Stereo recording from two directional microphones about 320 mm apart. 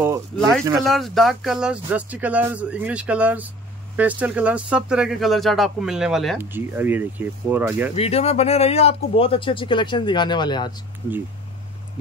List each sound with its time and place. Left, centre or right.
0.0 s speech: centre
7.9 s speech: centre